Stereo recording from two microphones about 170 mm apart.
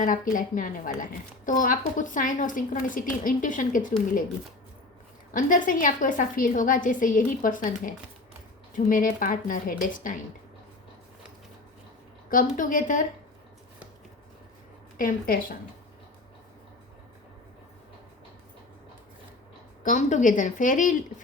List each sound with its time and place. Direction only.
0.0 s a woman's voice: 50° left (ahead or behind)
5.3 s a woman's voice: 50° left (ahead or behind)
12.3 s a woman's voice: 50° left (ahead or behind)
14.9 s a woman's voice: 55° left (ahead or behind)
19.8 s a woman's voice: 45° left (ahead or behind)